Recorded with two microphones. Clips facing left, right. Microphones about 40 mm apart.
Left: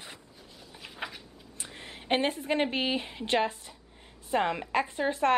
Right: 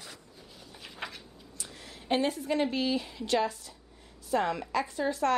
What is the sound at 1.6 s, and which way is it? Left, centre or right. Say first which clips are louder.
Speech: left 3 dB; left.